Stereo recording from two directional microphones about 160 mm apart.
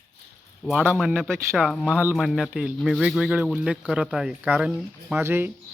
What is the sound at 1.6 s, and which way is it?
Speech, centre (ahead or behind).